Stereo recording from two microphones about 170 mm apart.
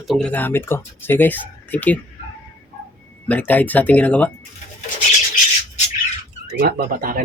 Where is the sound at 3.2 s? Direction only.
10° left (ahead or behind).